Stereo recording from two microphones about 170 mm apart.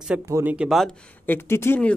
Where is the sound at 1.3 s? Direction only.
15° left (ahead or behind).